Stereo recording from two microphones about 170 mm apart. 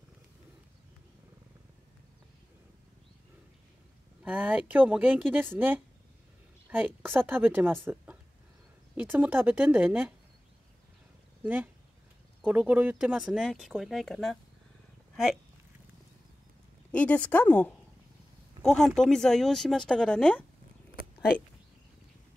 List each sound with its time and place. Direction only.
4.2 s speech: 10° right (ahead or behind)
11.4 s speech: 10° right (ahead or behind)
16.9 s speech: 10° left (ahead or behind)